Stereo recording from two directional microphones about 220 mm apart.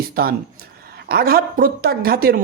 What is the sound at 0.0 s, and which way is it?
Speech, 45° right (ahead or behind).